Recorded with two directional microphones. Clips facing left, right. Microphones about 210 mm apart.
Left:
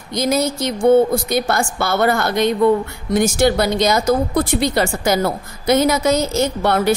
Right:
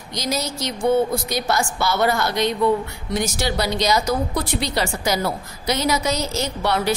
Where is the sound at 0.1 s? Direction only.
55° left (ahead or behind).